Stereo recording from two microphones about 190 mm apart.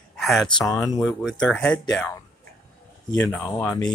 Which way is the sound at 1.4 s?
5° left (ahead or behind).